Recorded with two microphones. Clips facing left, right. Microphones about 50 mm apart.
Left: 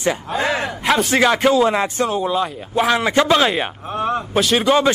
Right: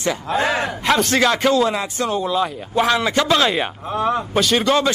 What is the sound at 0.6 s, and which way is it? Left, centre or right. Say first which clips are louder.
A man's voice: even; centre.